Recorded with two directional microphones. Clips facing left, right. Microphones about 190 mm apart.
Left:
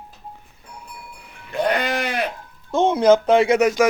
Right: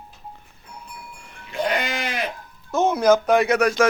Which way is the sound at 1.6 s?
60° left (ahead or behind).